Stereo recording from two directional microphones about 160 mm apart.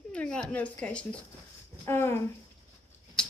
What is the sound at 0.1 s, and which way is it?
Speech, 5° left (ahead or behind).